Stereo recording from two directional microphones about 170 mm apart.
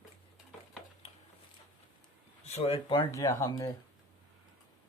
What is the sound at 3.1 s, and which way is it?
Speech, 20° left (ahead or behind).